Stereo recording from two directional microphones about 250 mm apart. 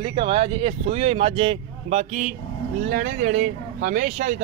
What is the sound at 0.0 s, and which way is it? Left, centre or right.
Speech, centre.